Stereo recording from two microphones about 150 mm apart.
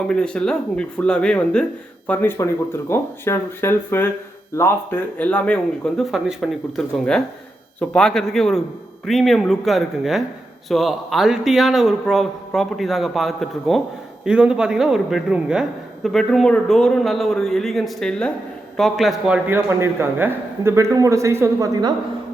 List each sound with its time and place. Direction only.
0.1 s a man's voice: 5° left (ahead or behind)
19.5 s a man's voice: 15° right (ahead or behind)